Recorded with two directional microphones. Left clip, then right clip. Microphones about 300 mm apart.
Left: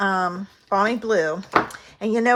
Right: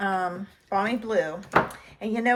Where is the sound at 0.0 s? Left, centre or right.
Centre.